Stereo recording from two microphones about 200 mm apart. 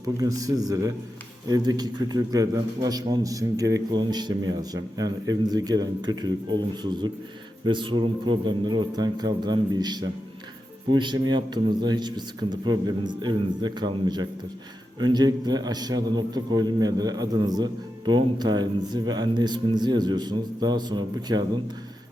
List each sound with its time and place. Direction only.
0.2 s a man's voice: 15° right (ahead or behind)